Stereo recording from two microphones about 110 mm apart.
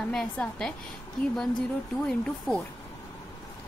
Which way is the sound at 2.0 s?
10° left (ahead or behind).